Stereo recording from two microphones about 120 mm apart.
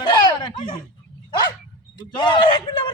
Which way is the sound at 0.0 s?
40° left (ahead or behind).